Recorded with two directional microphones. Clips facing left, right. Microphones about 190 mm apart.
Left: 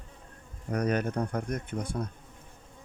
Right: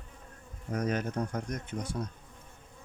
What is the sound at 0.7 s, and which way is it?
Speech, 60° left (ahead or behind).